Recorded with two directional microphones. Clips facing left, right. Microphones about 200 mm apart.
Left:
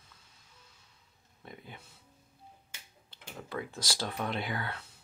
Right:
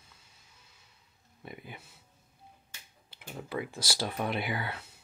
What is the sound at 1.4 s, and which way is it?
Speech, 10° right (ahead or behind).